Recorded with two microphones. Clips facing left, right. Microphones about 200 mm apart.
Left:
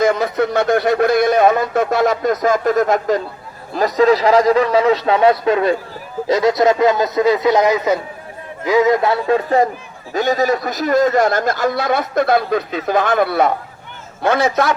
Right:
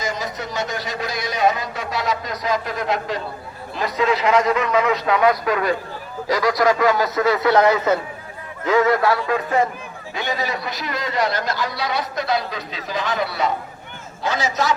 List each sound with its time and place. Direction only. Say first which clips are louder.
0.0 s a man's voice: left 11 dB; 60° left (ahead or behind); by 9.6 s 30° left (ahead or behind)
10.2 s a man's voice: left 9 dB; 45° left (ahead or behind)